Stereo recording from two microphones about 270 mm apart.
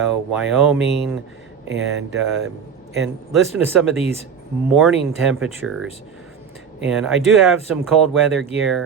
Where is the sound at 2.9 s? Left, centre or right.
Centre.